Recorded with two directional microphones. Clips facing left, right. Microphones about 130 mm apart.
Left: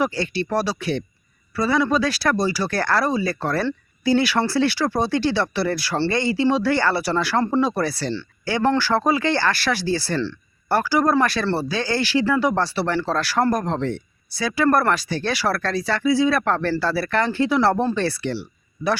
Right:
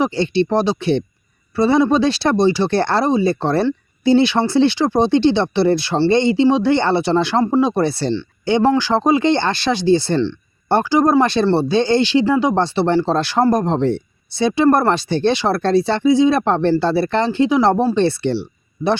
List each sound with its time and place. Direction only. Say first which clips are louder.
0.0 s speech: right 6 dB; 25° right (ahead or behind)